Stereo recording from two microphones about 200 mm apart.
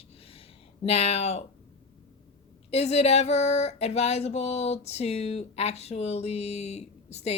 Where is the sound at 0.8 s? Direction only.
30° left (ahead or behind).